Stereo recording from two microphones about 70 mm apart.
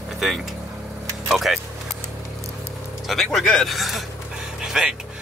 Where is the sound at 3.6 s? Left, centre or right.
Centre.